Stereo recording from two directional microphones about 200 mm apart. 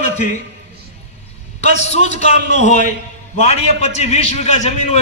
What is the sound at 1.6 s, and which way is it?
A man's voice, 35° left (ahead or behind).